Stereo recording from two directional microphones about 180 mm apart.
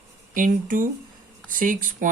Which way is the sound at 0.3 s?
50° right (ahead or behind).